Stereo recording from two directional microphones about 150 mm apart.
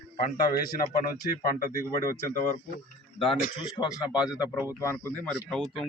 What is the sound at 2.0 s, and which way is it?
Speech, 20° left (ahead or behind).